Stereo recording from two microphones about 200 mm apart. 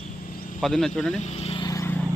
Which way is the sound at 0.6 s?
Centre (ahead or behind).